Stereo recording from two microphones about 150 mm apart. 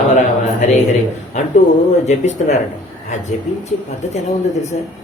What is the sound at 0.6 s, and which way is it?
Speech, 55° left (ahead or behind).